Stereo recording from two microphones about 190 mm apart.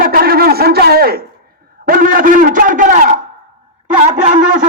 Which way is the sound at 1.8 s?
50° right (ahead or behind).